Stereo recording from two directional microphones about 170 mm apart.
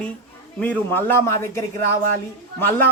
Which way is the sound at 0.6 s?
10° left (ahead or behind).